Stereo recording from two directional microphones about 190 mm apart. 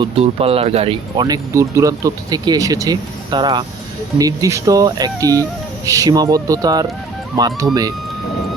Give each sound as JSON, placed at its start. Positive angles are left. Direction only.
{"t": 0.0, "sound": "speech", "side_deg": -30}